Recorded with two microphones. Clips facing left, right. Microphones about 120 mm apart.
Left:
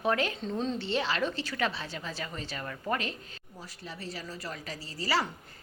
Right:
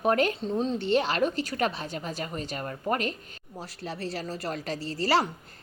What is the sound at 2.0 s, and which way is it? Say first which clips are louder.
Speech: right 5 dB; 40° right (ahead or behind).